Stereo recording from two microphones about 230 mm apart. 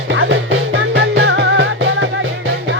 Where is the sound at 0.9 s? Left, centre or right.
Right.